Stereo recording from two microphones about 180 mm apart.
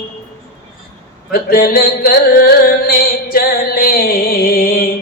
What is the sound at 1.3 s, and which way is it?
Music, 55° left (ahead or behind).